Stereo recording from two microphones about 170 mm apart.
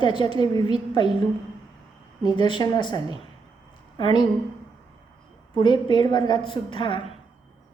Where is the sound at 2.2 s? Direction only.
25° left (ahead or behind).